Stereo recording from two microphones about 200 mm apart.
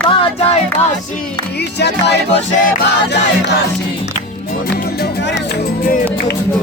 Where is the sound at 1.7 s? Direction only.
55° left (ahead or behind).